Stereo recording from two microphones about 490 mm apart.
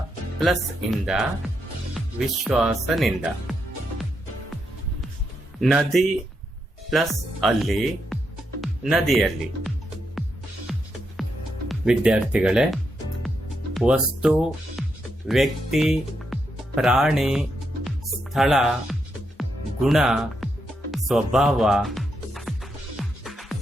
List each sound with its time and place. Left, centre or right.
0.3 s speech: centre
5.5 s speech: centre
10.7 s music: centre
11.7 s speech: centre
17.8 s music: centre